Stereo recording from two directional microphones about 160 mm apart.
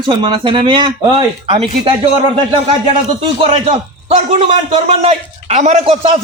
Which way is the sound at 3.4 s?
35° right (ahead or behind).